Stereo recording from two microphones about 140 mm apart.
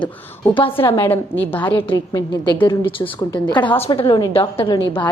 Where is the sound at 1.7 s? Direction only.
40° left (ahead or behind).